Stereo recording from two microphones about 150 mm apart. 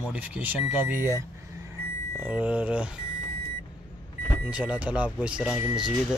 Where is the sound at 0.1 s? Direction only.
10° right (ahead or behind).